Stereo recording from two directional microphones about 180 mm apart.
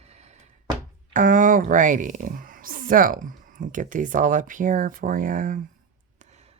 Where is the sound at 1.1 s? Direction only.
45° right (ahead or behind).